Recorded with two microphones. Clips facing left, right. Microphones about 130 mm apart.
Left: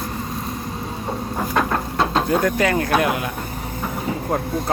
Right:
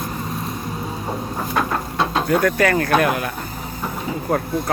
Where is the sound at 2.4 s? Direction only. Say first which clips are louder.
Right 1 dB; 20° left (ahead or behind).